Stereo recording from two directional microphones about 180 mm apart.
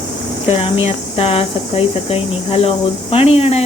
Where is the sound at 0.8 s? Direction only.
30° left (ahead or behind).